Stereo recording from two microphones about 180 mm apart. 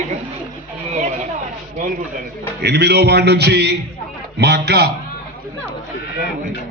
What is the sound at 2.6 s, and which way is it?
A man's voice, 65° right (ahead or behind).